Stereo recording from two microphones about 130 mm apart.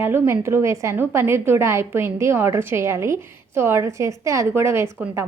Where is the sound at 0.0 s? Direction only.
20° right (ahead or behind).